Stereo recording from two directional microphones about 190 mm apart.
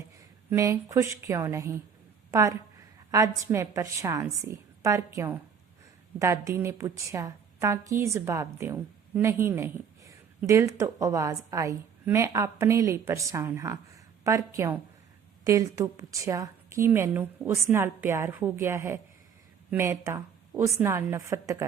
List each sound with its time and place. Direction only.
0.5 s a woman's voice: 15° right (ahead or behind)